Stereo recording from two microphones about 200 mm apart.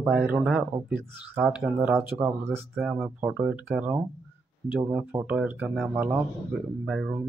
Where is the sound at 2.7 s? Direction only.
Centre (ahead or behind).